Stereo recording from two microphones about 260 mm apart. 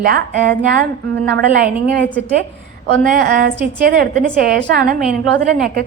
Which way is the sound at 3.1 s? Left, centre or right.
Right.